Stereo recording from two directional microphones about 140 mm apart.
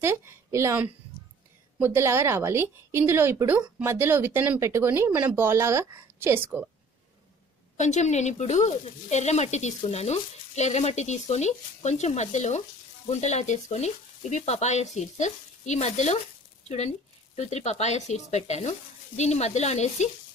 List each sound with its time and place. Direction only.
0.0 s a woman's voice: 20° right (ahead or behind)
7.7 s speech: 55° left (ahead or behind)